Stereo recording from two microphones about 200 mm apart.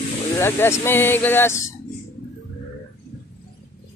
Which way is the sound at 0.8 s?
10° left (ahead or behind).